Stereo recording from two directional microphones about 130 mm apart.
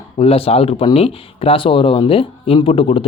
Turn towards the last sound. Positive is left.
turn(degrees=45)  # may be behind; listen again after turning